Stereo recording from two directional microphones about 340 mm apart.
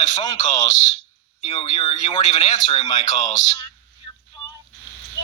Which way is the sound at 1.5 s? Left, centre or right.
Centre.